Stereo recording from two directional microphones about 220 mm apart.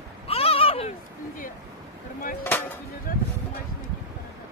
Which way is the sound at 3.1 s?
40° left (ahead or behind).